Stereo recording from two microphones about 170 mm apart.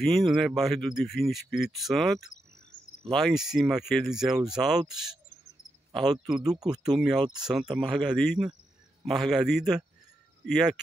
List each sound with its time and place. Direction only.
0.0 s speech: centre (ahead or behind)
5.9 s speech: centre (ahead or behind)